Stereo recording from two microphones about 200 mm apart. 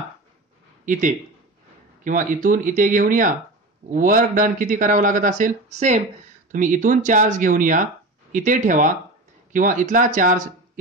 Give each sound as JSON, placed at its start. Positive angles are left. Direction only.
{"t": 0.8, "sound": "speech", "side_deg": -40}